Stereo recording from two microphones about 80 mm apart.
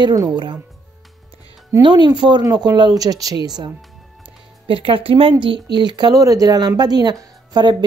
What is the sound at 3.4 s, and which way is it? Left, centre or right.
Speech, right.